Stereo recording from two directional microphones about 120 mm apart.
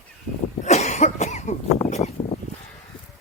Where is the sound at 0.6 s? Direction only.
65° left (ahead or behind).